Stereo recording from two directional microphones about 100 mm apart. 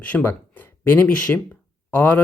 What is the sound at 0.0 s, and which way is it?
Speech, 15° left (ahead or behind).